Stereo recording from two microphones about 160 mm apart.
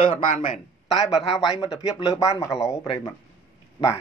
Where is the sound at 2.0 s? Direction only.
20° left (ahead or behind).